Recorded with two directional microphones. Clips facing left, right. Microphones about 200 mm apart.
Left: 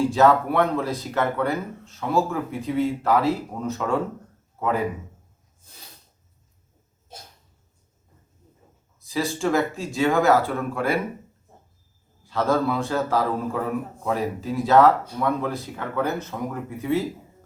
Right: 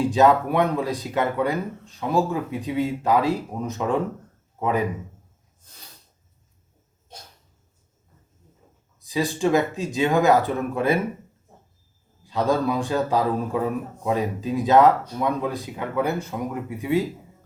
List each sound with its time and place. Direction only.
0.1 s a man's voice: 15° right (ahead or behind)
9.0 s speech: 15° right (ahead or behind)
12.2 s speech: 15° right (ahead or behind)